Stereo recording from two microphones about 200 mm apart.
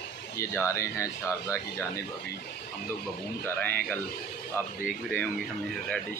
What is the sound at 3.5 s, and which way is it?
Speech, 10° left (ahead or behind).